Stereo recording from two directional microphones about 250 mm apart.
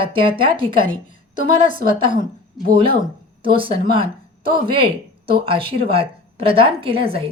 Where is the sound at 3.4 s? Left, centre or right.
Right.